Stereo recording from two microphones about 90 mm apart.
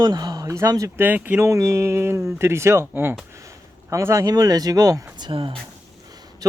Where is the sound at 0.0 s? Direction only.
45° right (ahead or behind).